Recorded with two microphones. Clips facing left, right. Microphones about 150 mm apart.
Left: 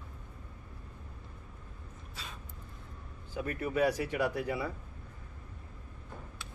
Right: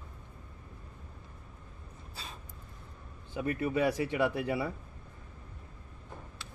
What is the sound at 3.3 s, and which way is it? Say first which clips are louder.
Speech: right 3 dB; 25° right (ahead or behind).